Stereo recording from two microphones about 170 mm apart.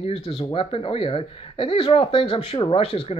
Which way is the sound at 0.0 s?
35° left (ahead or behind).